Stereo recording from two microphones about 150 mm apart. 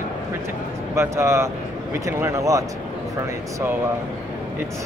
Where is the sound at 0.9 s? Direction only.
20° right (ahead or behind).